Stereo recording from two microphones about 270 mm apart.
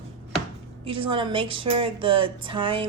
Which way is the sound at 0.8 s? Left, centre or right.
Centre.